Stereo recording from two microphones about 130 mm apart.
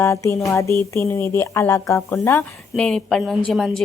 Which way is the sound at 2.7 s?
5° left (ahead or behind).